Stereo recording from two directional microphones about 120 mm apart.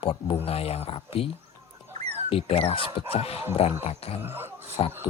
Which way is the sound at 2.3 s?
55° left (ahead or behind).